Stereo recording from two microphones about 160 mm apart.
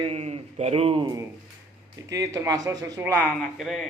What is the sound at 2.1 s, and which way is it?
Speech, 20° right (ahead or behind).